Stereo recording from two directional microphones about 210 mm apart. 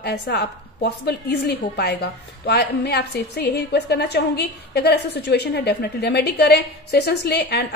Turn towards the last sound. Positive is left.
turn(degrees=50)  # may be behind; listen again after turning